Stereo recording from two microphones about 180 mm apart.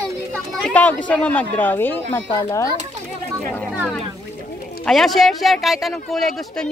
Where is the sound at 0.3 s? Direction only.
5° right (ahead or behind).